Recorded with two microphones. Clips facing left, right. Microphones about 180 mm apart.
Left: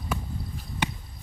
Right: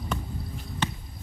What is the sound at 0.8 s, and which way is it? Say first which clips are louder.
Basketball bounce: left 1 dB; 10° left (ahead or behind).